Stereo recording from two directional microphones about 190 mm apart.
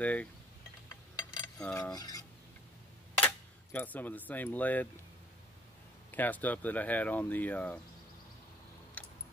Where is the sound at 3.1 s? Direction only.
10° left (ahead or behind).